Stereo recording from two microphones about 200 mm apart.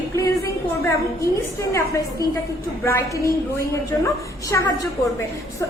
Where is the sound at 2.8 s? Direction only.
15° left (ahead or behind).